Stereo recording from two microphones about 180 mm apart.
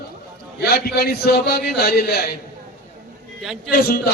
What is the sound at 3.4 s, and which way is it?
Speech, 5° right (ahead or behind).